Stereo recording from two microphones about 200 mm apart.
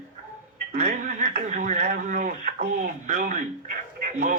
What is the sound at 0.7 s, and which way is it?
Speech, 45° right (ahead or behind).